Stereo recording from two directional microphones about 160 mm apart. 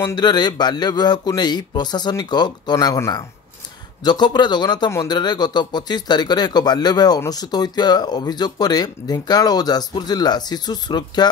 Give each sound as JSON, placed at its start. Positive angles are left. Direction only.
{"t": 0.1, "sound": "a man's voice", "side_deg": 25}